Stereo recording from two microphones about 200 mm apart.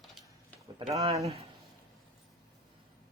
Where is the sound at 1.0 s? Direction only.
15° right (ahead or behind).